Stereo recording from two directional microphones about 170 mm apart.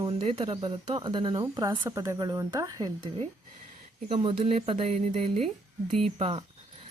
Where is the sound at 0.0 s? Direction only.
30° right (ahead or behind).